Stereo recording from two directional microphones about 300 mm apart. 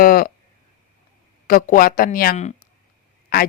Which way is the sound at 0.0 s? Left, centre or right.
Left.